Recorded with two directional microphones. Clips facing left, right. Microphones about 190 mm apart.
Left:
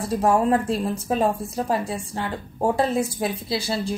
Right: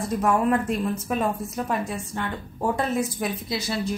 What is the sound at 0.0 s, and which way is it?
A woman's voice, 30° left (ahead or behind).